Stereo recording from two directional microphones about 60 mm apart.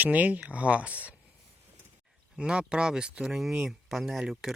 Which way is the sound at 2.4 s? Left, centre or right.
Centre.